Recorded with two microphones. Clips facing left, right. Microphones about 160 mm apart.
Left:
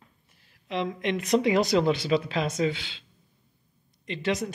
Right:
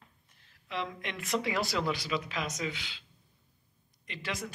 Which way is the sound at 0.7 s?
20° left (ahead or behind).